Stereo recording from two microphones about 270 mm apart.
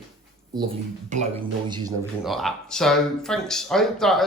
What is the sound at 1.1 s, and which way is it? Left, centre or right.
Speech, right.